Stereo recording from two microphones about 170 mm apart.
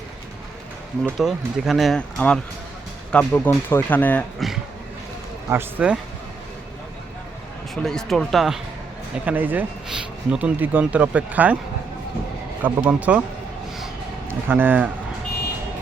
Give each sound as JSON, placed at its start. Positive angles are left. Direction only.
{"t": 1.2, "sound": "speech", "side_deg": 0}
{"t": 5.5, "sound": "speech", "side_deg": -10}
{"t": 7.8, "sound": "speech", "side_deg": 5}
{"t": 12.6, "sound": "speech", "side_deg": -10}
{"t": 14.3, "sound": "speech", "side_deg": -10}